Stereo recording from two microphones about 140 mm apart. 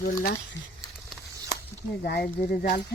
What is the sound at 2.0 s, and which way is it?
Speech, 90° left.